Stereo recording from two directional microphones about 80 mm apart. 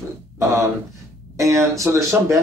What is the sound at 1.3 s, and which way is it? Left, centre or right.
Speech, right.